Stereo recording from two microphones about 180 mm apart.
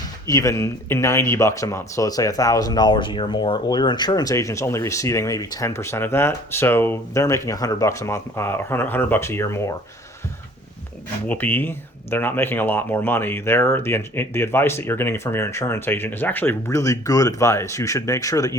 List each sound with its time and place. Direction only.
0.3 s speech: 15° left (ahead or behind)
11.3 s speech: 10° left (ahead or behind)